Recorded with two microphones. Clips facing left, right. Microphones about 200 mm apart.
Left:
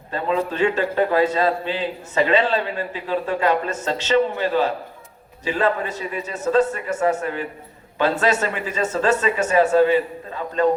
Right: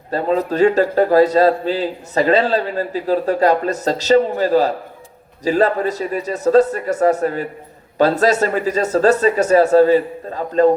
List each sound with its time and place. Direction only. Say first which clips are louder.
0.1 s a man's voice: right 5 dB; 40° right (ahead or behind)